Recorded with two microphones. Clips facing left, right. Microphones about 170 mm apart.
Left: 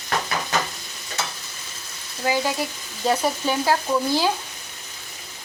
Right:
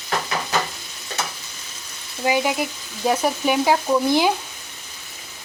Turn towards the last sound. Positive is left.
turn(degrees=-15)  # may be behind; listen again after turning